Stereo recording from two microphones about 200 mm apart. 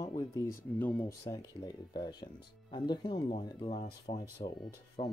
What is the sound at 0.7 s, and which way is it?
Speech, 10° left (ahead or behind).